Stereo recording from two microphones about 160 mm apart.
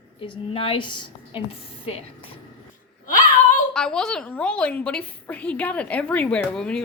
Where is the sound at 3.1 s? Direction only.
55° left (ahead or behind).